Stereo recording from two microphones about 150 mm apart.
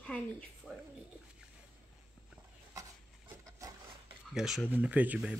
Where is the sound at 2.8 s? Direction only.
20° right (ahead or behind).